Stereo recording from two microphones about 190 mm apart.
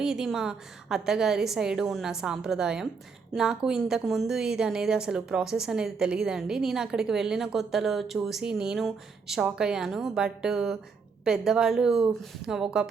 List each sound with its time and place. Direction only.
0.0 s a woman's voice: 5° right (ahead or behind)